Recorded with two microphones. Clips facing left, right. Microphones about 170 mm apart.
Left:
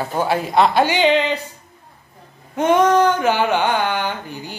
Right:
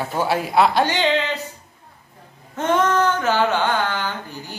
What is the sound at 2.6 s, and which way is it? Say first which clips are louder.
Speech: left 5 dB; 15° left (ahead or behind).